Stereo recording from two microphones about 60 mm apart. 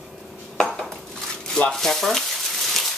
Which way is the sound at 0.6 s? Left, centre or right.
Centre.